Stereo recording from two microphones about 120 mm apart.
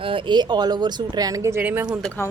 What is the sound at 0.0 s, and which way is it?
Speech, 45° right (ahead or behind).